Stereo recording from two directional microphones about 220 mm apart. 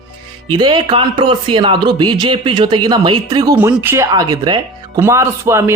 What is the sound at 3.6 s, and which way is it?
Speech, 10° right (ahead or behind).